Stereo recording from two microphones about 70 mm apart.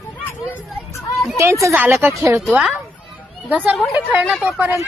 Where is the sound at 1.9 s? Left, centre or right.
Right.